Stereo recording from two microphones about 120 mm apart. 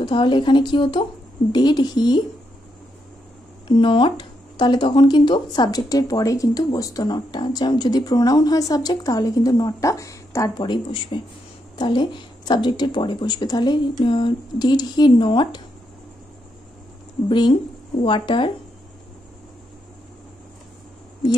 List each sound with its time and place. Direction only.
0.0 s speech: 45° left (ahead or behind)
3.6 s speech: 40° left (ahead or behind); by 10.5 s 25° left (ahead or behind)
10.6 s speech: 40° left (ahead or behind)
17.3 s speech: 40° left (ahead or behind)